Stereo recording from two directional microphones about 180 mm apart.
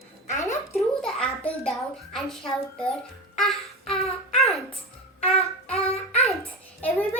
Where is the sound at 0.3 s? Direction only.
15° left (ahead or behind).